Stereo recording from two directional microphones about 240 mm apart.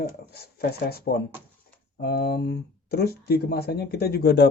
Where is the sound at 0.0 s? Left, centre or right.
Left.